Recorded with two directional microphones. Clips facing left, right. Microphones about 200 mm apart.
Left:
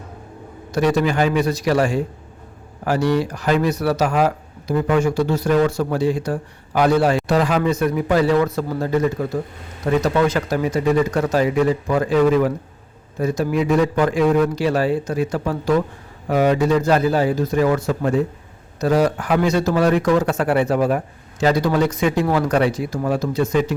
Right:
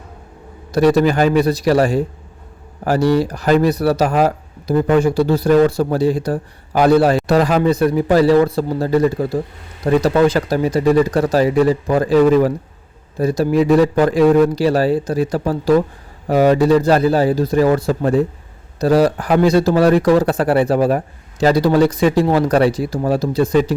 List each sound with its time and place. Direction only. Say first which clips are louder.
0.7 s a man's voice: right 5 dB; 35° right (ahead or behind)